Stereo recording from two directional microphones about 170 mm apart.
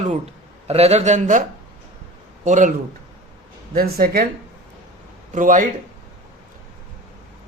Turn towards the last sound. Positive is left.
turn(degrees=-50)  # may be behind; listen again after turning